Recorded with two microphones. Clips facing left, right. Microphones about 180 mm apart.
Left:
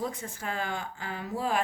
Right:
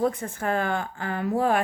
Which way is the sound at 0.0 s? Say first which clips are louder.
Right 9 dB; 55° right (ahead or behind).